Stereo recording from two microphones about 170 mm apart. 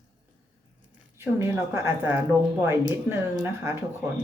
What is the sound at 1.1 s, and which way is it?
A woman's voice, 15° right (ahead or behind).